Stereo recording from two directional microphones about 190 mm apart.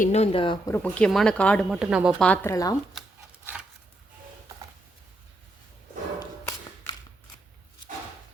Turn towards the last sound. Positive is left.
turn(degrees=20)  # may be behind; listen again after turning